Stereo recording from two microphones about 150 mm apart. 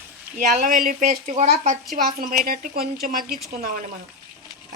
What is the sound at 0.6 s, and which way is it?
Speech, 70° right (ahead or behind).